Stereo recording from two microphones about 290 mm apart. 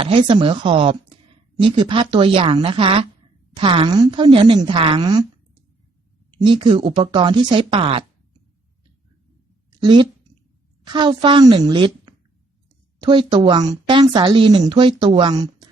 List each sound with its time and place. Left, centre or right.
0.0 s speech: centre
6.3 s speech: centre
9.6 s a sound: centre
10.8 s speech: centre